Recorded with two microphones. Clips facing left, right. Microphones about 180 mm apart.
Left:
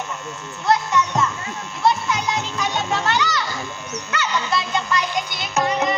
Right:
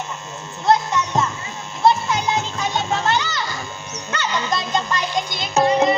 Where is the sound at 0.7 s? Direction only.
30° right (ahead or behind).